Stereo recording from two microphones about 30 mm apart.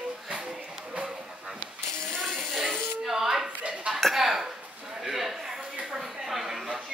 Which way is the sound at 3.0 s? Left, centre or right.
Centre.